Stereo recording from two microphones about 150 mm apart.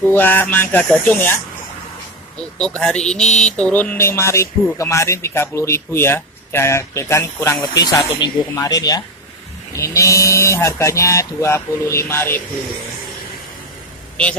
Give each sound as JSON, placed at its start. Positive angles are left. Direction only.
{"t": 0.1, "sound": "speech", "side_deg": 15}
{"t": 2.6, "sound": "speech", "side_deg": 5}